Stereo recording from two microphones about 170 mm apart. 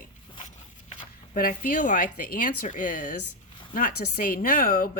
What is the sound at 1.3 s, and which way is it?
A woman's voice, 55° left (ahead or behind).